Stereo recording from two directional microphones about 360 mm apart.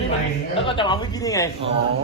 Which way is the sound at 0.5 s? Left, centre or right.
Centre.